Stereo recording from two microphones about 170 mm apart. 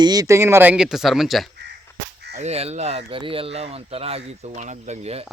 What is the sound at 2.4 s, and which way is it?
Speech, 40° right (ahead or behind).